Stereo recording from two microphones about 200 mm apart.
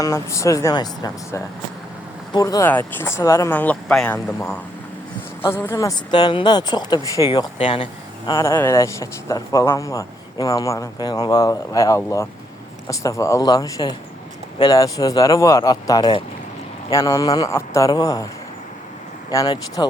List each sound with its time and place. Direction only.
0.0 s a man's voice: 15° left (ahead or behind)
19.3 s a man's voice: 15° left (ahead or behind)